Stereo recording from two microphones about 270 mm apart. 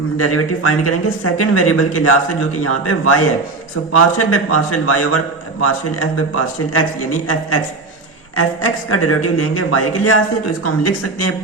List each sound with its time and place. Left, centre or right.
0.2 s a man's voice: left